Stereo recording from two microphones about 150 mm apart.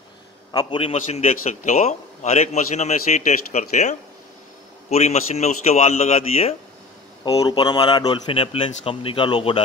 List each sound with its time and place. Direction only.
0.5 s speech: 30° left (ahead or behind)
0.9 s a man's voice: 50° left (ahead or behind)
7.2 s speech: 25° left (ahead or behind)